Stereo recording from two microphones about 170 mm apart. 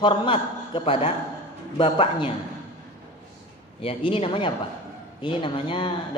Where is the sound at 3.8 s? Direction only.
30° left (ahead or behind).